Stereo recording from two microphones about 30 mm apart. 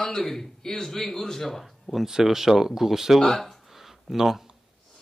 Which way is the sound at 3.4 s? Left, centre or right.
Centre.